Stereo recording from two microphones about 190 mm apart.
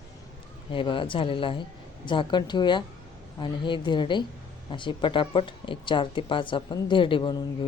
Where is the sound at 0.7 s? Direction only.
25° left (ahead or behind).